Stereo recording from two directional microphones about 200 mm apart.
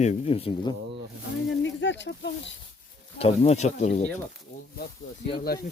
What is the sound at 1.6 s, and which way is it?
Speech, 65° left (ahead or behind).